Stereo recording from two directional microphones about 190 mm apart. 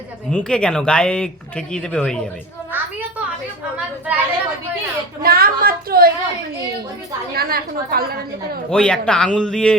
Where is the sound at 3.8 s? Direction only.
5° right (ahead or behind).